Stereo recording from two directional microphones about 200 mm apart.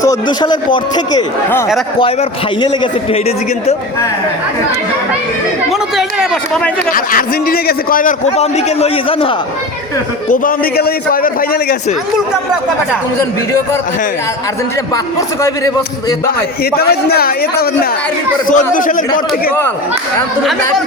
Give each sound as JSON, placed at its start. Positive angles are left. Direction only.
{"t": 0.1, "sound": "a man's voice", "side_deg": 20}
{"t": 2.6, "sound": "a man's voice", "side_deg": 25}
{"t": 6.0, "sound": "a man's voice", "side_deg": 0}
{"t": 6.9, "sound": "a man's voice", "side_deg": 45}
{"t": 10.2, "sound": "a man's voice", "side_deg": 45}
{"t": 15.4, "sound": "a man's voice", "side_deg": 15}
{"t": 16.7, "sound": "a man's voice", "side_deg": 50}